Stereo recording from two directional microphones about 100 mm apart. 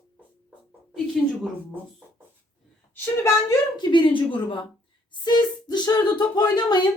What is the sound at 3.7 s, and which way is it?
A woman's voice, 55° left (ahead or behind).